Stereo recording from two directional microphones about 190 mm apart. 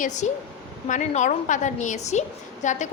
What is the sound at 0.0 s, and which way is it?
A woman's voice, 40° left (ahead or behind).